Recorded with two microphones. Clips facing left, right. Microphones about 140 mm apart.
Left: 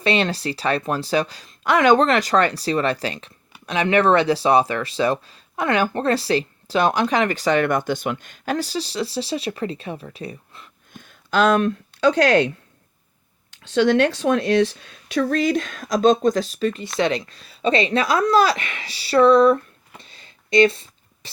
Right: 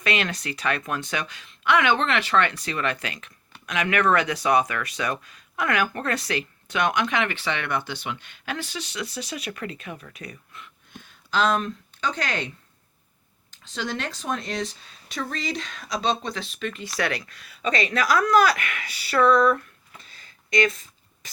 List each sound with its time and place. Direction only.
0.0 s speech: 30° left (ahead or behind)
10.9 s a sound: 50° left (ahead or behind)
12.1 s speech: 60° left (ahead or behind)
13.8 s speech: 70° left (ahead or behind)
15.1 s speech: 60° left (ahead or behind); by 16.8 s 35° left (ahead or behind)
17.0 s speech: 25° left (ahead or behind)